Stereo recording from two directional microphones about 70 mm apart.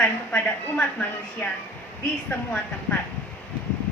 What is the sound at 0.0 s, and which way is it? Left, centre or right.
A woman's voice, left.